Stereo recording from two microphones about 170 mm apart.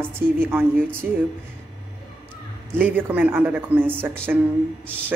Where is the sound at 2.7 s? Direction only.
10° right (ahead or behind).